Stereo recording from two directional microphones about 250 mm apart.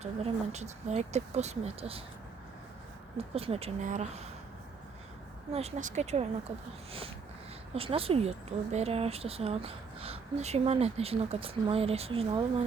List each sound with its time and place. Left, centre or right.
0.0 s speech: right
3.2 s speech: right
5.5 s speech: right
7.7 s speech: right